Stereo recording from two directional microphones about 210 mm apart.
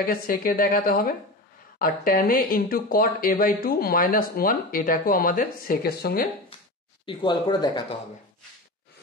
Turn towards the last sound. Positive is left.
turn(degrees=20)  # may be behind; listen again after turning